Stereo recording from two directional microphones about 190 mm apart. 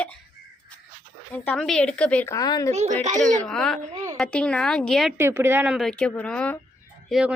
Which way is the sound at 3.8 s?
40° right (ahead or behind).